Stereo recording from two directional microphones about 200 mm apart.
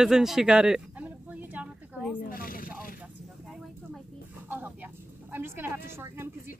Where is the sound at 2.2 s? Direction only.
45° left (ahead or behind).